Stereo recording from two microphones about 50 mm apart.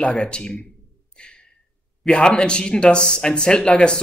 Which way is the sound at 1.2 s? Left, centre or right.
Left.